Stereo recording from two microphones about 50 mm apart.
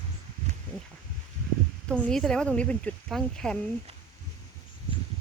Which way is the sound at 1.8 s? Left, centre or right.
Left.